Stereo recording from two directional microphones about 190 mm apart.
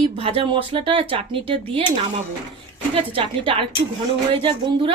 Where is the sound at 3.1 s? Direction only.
25° right (ahead or behind).